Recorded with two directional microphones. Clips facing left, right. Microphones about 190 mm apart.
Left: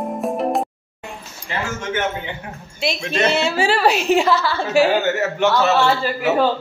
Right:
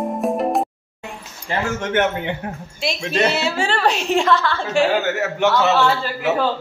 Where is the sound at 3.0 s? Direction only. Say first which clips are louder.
Right 2 dB; 30° right (ahead or behind).